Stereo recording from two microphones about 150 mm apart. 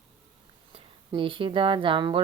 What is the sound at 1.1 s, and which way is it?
Speech, 35° right (ahead or behind).